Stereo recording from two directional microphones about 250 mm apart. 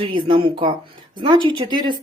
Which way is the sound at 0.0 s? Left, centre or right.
Centre.